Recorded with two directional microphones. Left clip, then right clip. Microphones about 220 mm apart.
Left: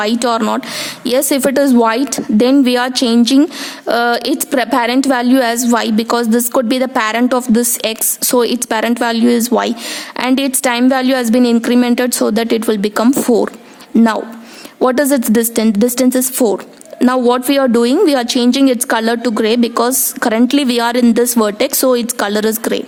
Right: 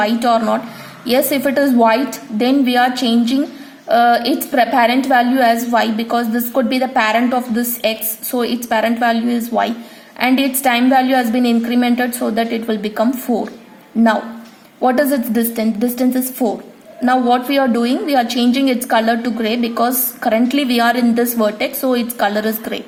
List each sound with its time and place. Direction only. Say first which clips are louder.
0.2 s a woman's voice: even; 45° left (ahead or behind)
14.8 s a woman's voice: left 2 dB; 50° left (ahead or behind)
15.5 s a woman's voice: left 5 dB; 40° left (ahead or behind)